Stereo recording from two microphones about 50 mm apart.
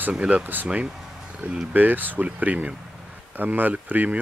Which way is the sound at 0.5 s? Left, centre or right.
Right.